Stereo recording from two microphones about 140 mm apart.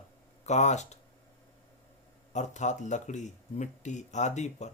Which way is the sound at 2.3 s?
60° left (ahead or behind).